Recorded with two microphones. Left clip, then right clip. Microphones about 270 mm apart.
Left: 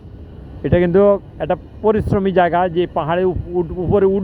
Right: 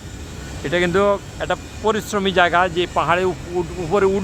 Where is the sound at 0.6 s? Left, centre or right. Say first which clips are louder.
Left 4 dB; centre.